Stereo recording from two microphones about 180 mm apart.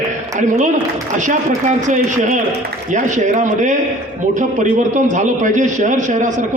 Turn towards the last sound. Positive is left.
turn(degrees=-45)  # may be behind; listen again after turning